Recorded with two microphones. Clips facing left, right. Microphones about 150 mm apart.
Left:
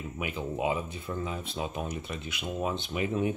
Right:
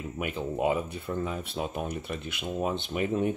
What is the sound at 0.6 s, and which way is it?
Speech, 50° right (ahead or behind).